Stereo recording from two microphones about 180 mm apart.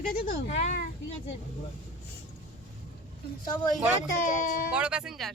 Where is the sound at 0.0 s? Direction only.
45° left (ahead or behind).